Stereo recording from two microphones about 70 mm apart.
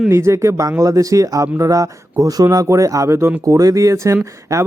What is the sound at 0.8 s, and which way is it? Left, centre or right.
Speech, right.